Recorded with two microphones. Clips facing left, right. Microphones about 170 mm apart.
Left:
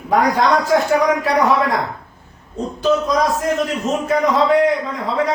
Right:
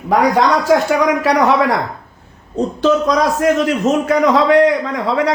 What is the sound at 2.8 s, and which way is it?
A man's voice, 75° right (ahead or behind).